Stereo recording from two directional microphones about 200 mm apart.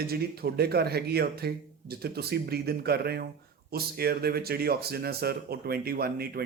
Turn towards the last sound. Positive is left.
turn(degrees=-50)  # may be behind; listen again after turning